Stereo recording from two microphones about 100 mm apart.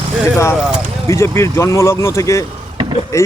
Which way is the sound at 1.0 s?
25° left (ahead or behind).